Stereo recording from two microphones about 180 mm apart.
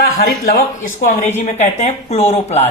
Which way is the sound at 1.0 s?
40° left (ahead or behind).